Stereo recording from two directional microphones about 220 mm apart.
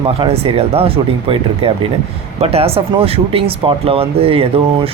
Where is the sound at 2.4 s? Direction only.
25° right (ahead or behind).